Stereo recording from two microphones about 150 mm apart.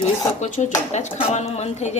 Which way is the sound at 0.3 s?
50° left (ahead or behind).